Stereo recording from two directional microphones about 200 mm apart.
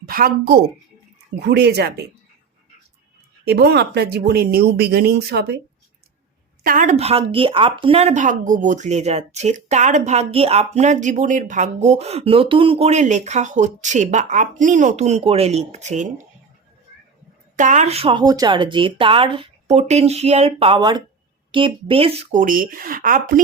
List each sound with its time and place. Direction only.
0.0 s a woman's voice: 45° right (ahead or behind)
3.4 s speech: 55° right (ahead or behind)
6.6 s speech: 40° right (ahead or behind)
17.6 s speech: 40° right (ahead or behind)